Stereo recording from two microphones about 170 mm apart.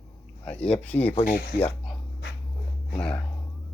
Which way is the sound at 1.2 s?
65° left (ahead or behind).